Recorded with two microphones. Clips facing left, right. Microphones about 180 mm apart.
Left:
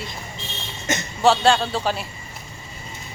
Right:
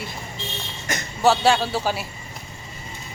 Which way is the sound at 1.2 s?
5° right (ahead or behind).